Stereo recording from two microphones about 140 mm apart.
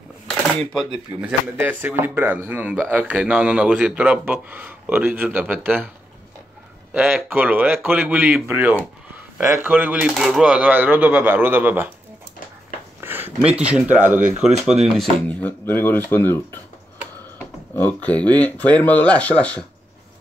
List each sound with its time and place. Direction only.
1.2 s speech: 15° right (ahead or behind)
6.9 s speech: 10° right (ahead or behind)
13.0 s speech: 15° right (ahead or behind)
13.9 s speech: 65° right (ahead or behind)
15.0 s speech: 5° left (ahead or behind)
17.7 s speech: 10° left (ahead or behind)